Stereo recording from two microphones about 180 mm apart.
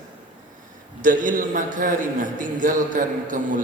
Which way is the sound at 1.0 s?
45° right (ahead or behind).